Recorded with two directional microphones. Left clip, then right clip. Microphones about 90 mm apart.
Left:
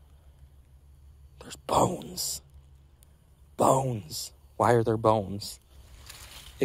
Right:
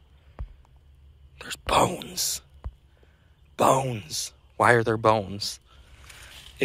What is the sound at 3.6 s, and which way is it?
Speech, 30° left (ahead or behind).